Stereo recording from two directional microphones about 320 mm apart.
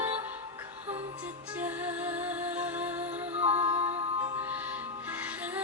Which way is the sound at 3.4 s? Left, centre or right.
Centre.